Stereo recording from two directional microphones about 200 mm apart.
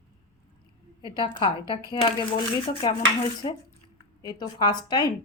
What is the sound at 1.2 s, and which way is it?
Speech, 25° left (ahead or behind).